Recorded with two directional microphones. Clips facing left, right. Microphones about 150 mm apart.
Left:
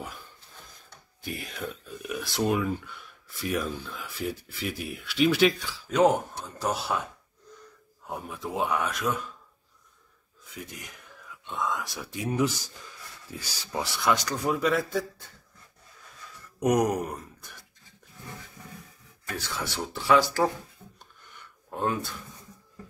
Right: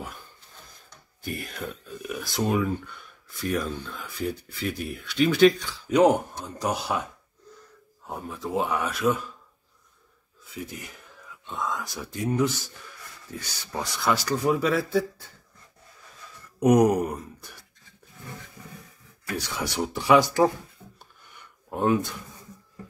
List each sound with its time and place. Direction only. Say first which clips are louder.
1.2 s speech: right 2 dB; centre (ahead or behind)
5.9 s speech: right 3 dB; 10° right (ahead or behind)
8.5 s speech: right 2 dB; 5° right (ahead or behind)
10.5 s speech: right 5 dB; 5° right (ahead or behind)
12.3 s speech: right 2 dB; 10° left (ahead or behind)
14.0 s speech: right 3 dB; 5° right (ahead or behind)
16.5 s speech: right 5 dB; 10° right (ahead or behind)
19.2 s speech: right 3 dB; 15° right (ahead or behind)
21.6 s speech: right 5 dB; 15° right (ahead or behind)